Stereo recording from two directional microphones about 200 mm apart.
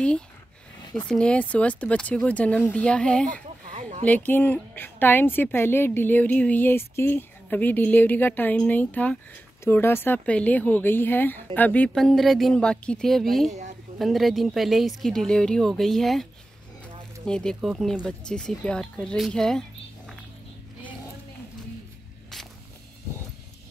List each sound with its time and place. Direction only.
0.9 s a woman's voice: 5° left (ahead or behind)
13.5 s a woman's voice: 35° right (ahead or behind)
13.9 s speech: centre (ahead or behind)
17.3 s speech: 5° left (ahead or behind)